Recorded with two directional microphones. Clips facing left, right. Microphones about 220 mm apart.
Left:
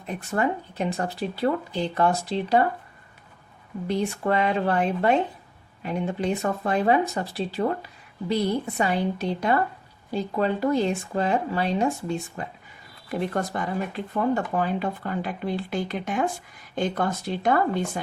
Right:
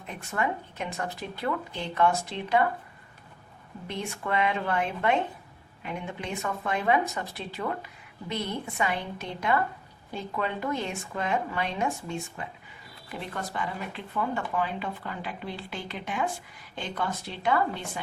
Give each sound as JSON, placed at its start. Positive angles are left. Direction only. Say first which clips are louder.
{"t": 0.3, "sound": "speech", "louder": "left 5 dB", "side_deg": 35}
{"t": 3.8, "sound": "speech", "louder": "left 8 dB", "side_deg": 35}